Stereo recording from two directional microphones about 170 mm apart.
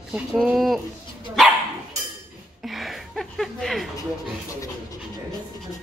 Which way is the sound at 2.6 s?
Centre (ahead or behind).